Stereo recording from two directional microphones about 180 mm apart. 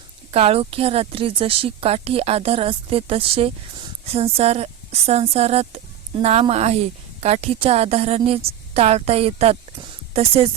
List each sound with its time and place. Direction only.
0.3 s speech: 35° right (ahead or behind)